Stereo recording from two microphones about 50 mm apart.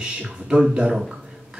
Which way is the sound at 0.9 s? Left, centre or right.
Centre.